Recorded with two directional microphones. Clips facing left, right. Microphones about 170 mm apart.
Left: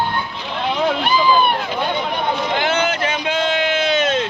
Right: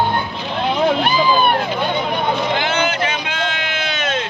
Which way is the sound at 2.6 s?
40° left (ahead or behind).